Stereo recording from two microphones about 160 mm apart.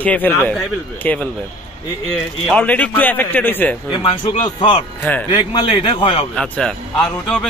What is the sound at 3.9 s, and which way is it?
Speech, 30° left (ahead or behind).